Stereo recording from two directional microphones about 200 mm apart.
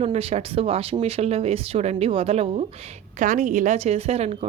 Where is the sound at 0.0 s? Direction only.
30° right (ahead or behind).